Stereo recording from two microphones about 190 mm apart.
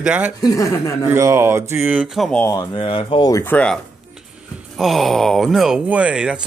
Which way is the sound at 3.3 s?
10° left (ahead or behind).